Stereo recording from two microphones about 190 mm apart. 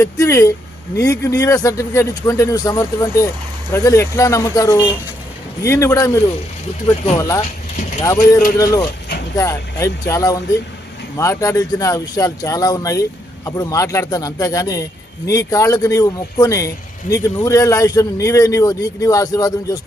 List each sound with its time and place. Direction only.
0.0 s speech: 15° left (ahead or behind)